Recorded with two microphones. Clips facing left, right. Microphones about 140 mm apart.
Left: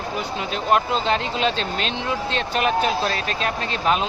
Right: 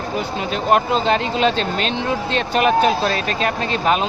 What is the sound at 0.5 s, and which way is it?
Speech, 55° right (ahead or behind).